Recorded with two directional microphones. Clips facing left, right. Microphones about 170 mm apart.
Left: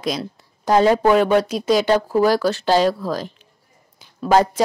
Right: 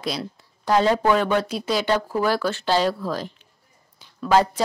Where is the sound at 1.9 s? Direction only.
40° left (ahead or behind).